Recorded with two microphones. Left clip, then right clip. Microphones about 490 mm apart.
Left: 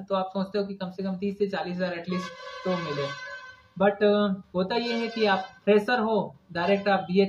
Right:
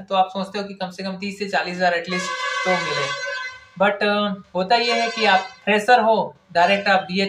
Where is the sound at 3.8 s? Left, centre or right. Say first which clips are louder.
Right 4 dB; left.